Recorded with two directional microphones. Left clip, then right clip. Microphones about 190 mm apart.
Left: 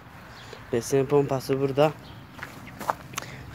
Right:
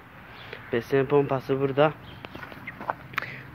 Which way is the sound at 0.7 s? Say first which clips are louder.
Even; 15° left (ahead or behind).